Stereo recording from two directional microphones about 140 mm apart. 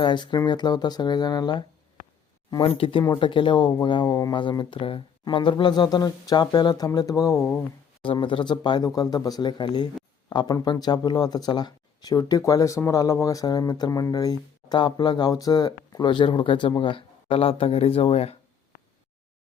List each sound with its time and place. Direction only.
0.0 s speech: 35° left (ahead or behind)
8.0 s speech: 40° left (ahead or behind)